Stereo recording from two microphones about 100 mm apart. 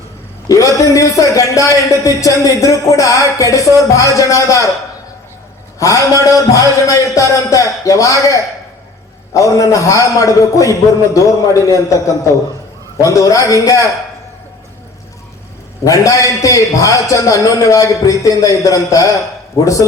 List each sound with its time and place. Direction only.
0.4 s a man's voice: 35° left (ahead or behind)
5.8 s a man's voice: 35° left (ahead or behind)
15.8 s a man's voice: 35° left (ahead or behind)